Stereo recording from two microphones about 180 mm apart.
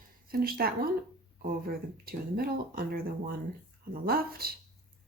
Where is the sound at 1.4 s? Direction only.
55° right (ahead or behind).